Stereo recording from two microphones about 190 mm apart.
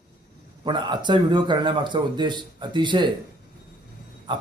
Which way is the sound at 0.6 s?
25° right (ahead or behind).